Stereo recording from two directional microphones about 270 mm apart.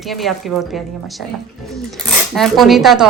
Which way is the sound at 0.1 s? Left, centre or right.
Centre.